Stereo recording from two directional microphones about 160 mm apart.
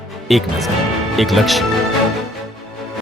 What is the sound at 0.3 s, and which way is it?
A woman's voice, centre (ahead or behind).